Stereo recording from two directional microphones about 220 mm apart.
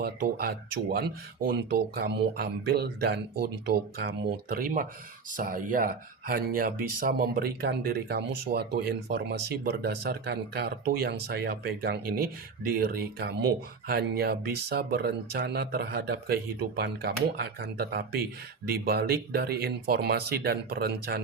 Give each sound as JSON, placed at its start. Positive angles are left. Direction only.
{"t": 0.0, "sound": "speech", "side_deg": -45}